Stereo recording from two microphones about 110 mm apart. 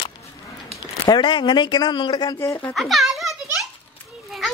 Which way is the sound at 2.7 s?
Centre (ahead or behind).